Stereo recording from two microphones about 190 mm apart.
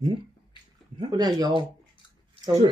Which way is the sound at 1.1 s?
20° right (ahead or behind).